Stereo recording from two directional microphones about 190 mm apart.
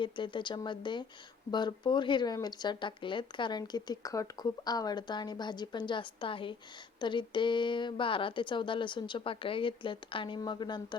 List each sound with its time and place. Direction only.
0.0 s speech: 25° left (ahead or behind)